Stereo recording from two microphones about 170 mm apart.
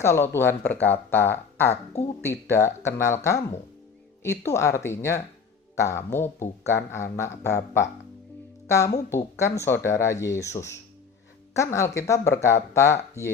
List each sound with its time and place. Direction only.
0.0 s speech: 15° left (ahead or behind)
1.7 s speech: 40° left (ahead or behind)
2.5 s speech: 15° left (ahead or behind)
4.2 s speech: 15° left (ahead or behind)